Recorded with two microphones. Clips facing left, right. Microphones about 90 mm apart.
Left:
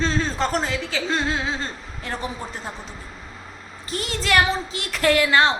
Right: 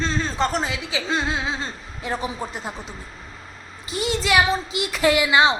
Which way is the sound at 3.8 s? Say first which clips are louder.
Right 2 dB; 5° right (ahead or behind).